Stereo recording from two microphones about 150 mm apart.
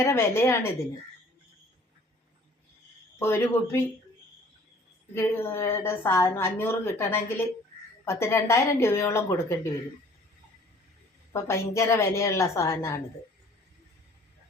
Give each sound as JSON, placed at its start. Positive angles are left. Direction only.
{"t": 0.0, "sound": "a woman's voice", "side_deg": 15}
{"t": 3.2, "sound": "a woman's voice", "side_deg": 15}
{"t": 5.1, "sound": "a woman's voice", "side_deg": 15}
{"t": 11.3, "sound": "a woman's voice", "side_deg": 20}